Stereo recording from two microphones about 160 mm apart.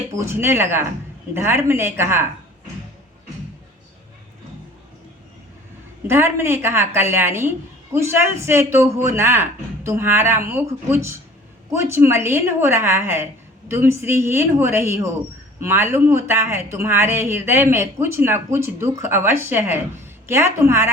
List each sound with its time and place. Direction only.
0.1 s speech: 15° right (ahead or behind)
6.1 s speech: 15° right (ahead or behind)